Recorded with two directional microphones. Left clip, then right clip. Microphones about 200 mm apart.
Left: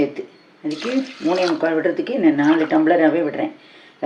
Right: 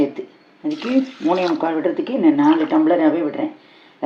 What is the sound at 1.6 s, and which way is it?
Speech, 15° right (ahead or behind).